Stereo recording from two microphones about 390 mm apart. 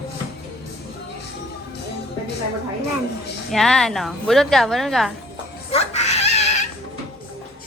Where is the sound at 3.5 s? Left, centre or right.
Centre.